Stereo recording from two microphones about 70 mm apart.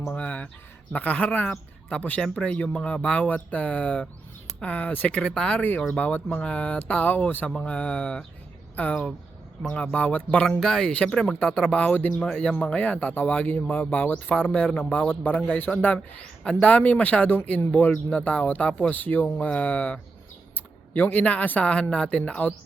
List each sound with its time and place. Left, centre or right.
0.1 s speech: left
5.3 s speech: centre
5.5 s speech: left
10.6 s speech: centre; by 15.4 s left
16.0 s speech: centre